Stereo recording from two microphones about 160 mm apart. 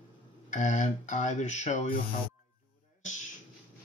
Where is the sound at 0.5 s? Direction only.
45° left (ahead or behind).